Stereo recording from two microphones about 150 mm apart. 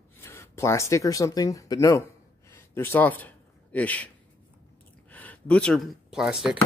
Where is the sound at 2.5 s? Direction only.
15° left (ahead or behind).